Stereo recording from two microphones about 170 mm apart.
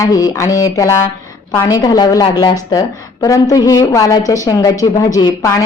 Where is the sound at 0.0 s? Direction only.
20° left (ahead or behind).